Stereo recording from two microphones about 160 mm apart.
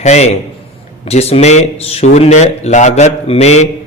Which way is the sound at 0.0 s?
45° left (ahead or behind).